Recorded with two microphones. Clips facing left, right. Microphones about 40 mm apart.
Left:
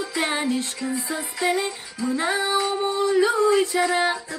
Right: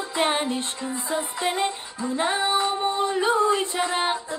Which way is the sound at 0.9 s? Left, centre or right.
Right.